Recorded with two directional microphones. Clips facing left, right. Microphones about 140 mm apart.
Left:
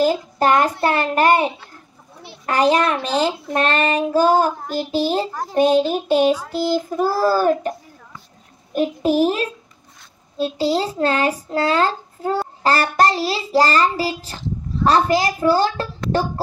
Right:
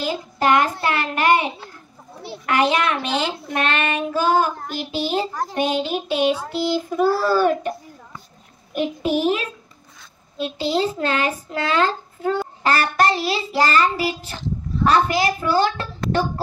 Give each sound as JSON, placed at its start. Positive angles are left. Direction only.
{"t": 0.0, "sound": "a child's voice", "side_deg": 40}
{"t": 6.5, "sound": "child singing", "side_deg": 45}
{"t": 7.1, "sound": "a child's voice", "side_deg": 35}
{"t": 8.7, "sound": "a child's voice", "side_deg": 35}